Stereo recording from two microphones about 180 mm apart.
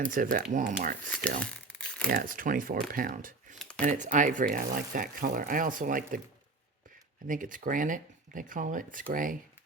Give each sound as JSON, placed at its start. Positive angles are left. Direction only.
{"t": 0.1, "sound": "speech", "side_deg": -50}
{"t": 1.4, "sound": "crumpling", "side_deg": 5}
{"t": 2.0, "sound": "speech", "side_deg": -50}
{"t": 7.3, "sound": "speech", "side_deg": -45}